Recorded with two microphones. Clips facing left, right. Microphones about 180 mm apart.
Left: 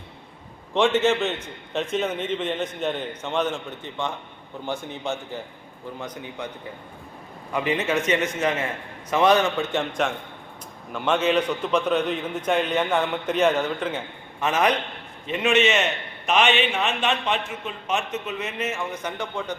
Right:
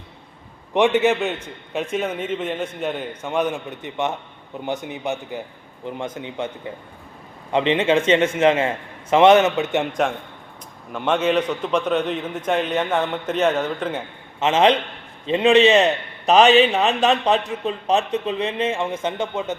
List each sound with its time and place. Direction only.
0.7 s a man's voice: 15° right (ahead or behind)
7.5 s a man's voice: 25° right (ahead or behind)
10.9 s a man's voice: centre (ahead or behind)
14.3 s a man's voice: 25° right (ahead or behind)